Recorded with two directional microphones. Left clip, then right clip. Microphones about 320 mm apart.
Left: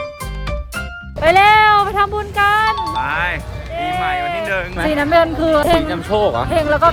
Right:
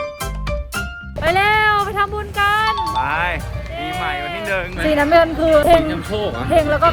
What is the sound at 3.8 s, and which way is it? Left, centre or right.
Speech, centre.